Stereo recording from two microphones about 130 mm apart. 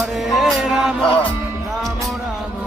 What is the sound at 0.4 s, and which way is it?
Music, 5° right (ahead or behind).